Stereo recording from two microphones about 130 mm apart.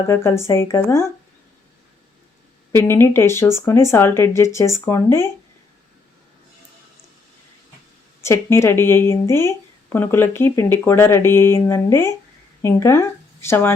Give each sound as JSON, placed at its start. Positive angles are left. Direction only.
{"t": 0.1, "sound": "speech", "side_deg": 20}
{"t": 2.7, "sound": "speech", "side_deg": 20}
{"t": 8.2, "sound": "speech", "side_deg": 20}